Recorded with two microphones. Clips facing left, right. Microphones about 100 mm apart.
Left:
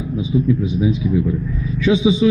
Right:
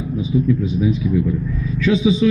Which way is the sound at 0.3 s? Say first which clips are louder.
Even; 30° left (ahead or behind).